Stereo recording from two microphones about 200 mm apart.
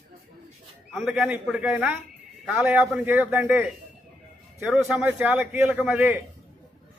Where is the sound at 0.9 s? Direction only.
Centre (ahead or behind).